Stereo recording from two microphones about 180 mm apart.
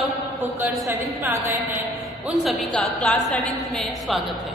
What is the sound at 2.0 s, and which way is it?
A woman's voice, centre (ahead or behind).